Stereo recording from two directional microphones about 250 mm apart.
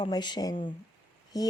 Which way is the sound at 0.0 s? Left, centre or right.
Centre.